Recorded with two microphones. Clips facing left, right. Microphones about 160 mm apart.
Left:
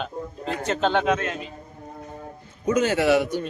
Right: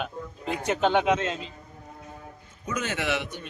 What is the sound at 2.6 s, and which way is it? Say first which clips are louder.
Speech: left 10 dB; 35° left (ahead or behind).